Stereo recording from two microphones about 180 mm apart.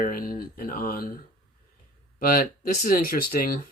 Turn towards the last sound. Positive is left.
turn(degrees=50)  # may be behind; listen again after turning